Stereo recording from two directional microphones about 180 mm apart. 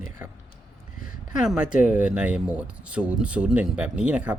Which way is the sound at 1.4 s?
5° right (ahead or behind).